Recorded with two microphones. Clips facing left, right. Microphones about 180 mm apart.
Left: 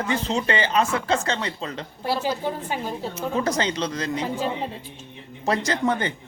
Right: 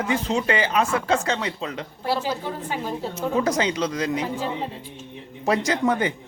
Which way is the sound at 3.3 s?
5° right (ahead or behind).